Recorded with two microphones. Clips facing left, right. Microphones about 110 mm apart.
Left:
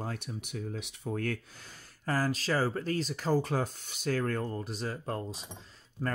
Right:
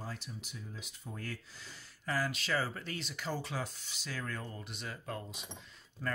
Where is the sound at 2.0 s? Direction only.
40° left (ahead or behind).